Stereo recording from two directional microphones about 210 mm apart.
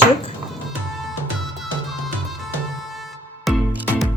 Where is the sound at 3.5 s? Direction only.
5° right (ahead or behind).